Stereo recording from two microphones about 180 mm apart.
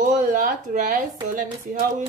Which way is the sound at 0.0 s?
45° right (ahead or behind).